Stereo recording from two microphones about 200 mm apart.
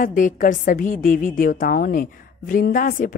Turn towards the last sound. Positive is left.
turn(degrees=45)  # may be behind; listen again after turning